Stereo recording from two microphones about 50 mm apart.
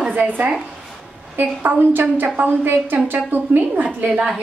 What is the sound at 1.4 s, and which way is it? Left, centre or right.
A woman's voice, right.